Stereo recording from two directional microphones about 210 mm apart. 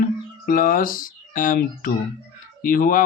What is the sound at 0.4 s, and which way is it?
Speech, 40° left (ahead or behind).